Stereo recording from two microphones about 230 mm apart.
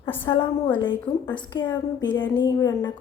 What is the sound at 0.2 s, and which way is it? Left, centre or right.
A woman's voice, centre.